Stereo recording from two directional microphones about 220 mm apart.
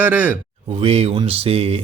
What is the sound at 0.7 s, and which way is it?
Speech, 25° right (ahead or behind).